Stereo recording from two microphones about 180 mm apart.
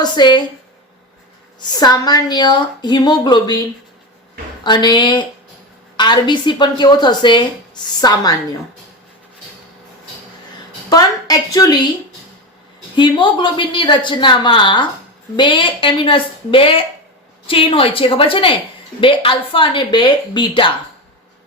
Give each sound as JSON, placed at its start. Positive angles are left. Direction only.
{"t": 0.0, "sound": "a woman's voice", "side_deg": 25}
{"t": 1.8, "sound": "a woman's voice", "side_deg": 20}
{"t": 4.6, "sound": "a woman's voice", "side_deg": 25}
{"t": 10.8, "sound": "a woman's voice", "side_deg": 20}
{"t": 13.0, "sound": "a woman's voice", "side_deg": 25}